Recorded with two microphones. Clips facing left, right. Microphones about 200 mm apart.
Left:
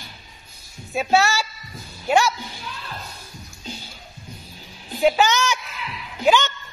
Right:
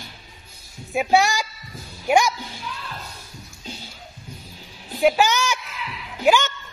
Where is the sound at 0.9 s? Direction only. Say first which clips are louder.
Right 1 dB; 15° right (ahead or behind).